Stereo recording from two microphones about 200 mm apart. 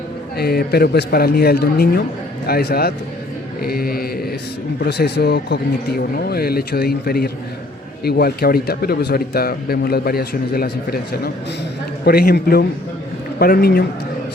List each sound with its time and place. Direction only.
0.3 s speech: 50° left (ahead or behind)